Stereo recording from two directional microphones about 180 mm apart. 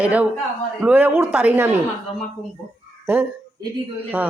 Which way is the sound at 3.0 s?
15° right (ahead or behind).